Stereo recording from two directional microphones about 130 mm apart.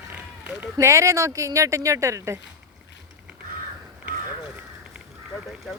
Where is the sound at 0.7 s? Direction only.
25° right (ahead or behind).